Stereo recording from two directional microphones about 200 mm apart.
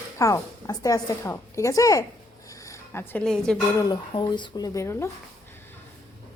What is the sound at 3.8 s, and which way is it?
A woman's voice, 20° left (ahead or behind).